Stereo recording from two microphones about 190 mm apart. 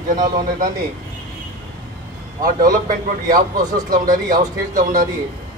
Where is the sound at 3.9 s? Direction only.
45° right (ahead or behind).